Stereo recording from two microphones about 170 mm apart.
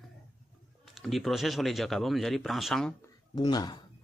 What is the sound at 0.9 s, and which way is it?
Speech, centre (ahead or behind).